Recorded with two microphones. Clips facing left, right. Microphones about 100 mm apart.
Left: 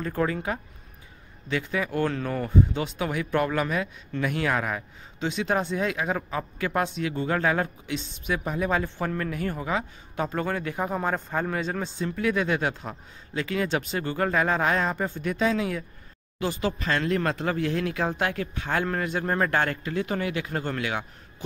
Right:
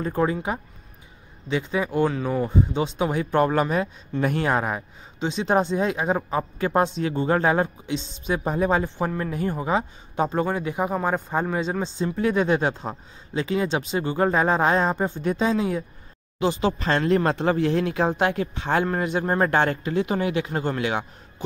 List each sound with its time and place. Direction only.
0.0 s speech: 20° right (ahead or behind)
2.0 s speech: 10° right (ahead or behind)
2.7 s speech: 25° right (ahead or behind)